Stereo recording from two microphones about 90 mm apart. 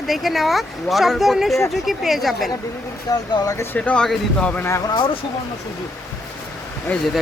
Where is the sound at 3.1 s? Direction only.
40° left (ahead or behind).